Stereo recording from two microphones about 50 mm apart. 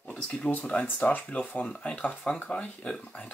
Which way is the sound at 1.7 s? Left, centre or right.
Centre.